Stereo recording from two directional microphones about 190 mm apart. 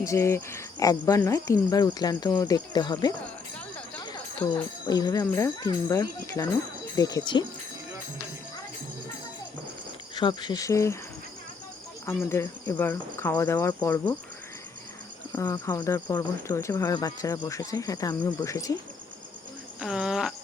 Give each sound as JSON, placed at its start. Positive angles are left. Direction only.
{"t": 0.0, "sound": "speech", "side_deg": 15}
{"t": 4.0, "sound": "a sound", "side_deg": 20}
{"t": 4.9, "sound": "speech", "side_deg": 20}
{"t": 10.2, "sound": "speech", "side_deg": 20}
{"t": 12.0, "sound": "speech", "side_deg": 15}
{"t": 15.3, "sound": "speech", "side_deg": 15}
{"t": 19.8, "sound": "cricket", "side_deg": -5}